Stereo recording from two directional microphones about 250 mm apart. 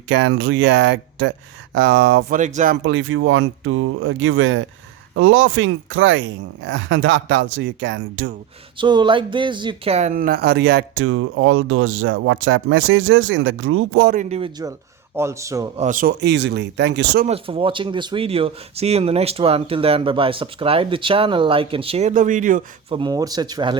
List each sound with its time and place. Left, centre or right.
0.1 s speech: right
2.4 s speech: right
2.7 s speech: right
8.8 s speech: centre; by 14.1 s right
14.1 s speech: right
15.1 s speech: centre
15.8 s speech: right
17.2 s speech: right
23.0 s speech: centre